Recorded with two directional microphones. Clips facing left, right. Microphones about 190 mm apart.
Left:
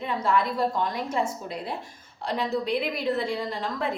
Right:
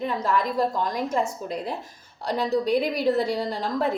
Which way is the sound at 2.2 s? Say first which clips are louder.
Right 4 dB; 40° right (ahead or behind).